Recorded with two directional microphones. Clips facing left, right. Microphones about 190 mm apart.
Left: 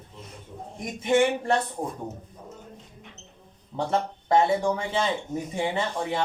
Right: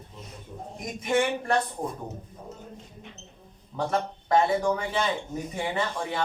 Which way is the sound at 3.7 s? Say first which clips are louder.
Left 1 dB; 25° left (ahead or behind).